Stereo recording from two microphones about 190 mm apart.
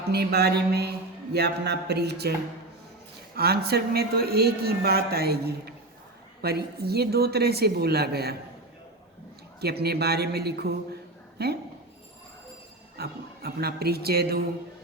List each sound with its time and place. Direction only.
0.1 s speech: 60° right (ahead or behind)
3.3 s speech: 55° right (ahead or behind)
9.6 s speech: 55° right (ahead or behind)
13.0 s speech: 55° right (ahead or behind)